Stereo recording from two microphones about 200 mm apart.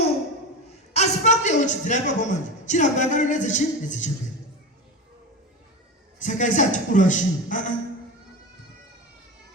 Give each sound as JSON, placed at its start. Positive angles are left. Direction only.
{"t": 0.9, "sound": "a woman's voice", "side_deg": 35}
{"t": 6.1, "sound": "a man's voice", "side_deg": 40}